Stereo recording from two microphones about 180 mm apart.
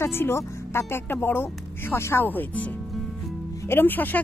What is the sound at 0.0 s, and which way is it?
Speech, 15° left (ahead or behind).